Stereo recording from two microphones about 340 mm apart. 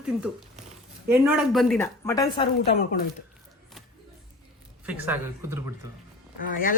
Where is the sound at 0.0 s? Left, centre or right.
Centre.